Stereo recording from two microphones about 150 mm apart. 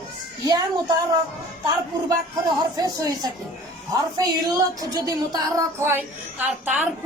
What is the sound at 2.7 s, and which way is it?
A woman's voice, 25° right (ahead or behind).